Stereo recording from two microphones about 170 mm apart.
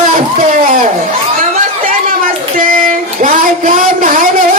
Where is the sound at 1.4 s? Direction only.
50° right (ahead or behind).